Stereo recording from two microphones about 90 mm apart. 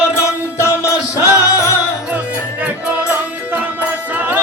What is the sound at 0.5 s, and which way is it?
Music, 35° left (ahead or behind).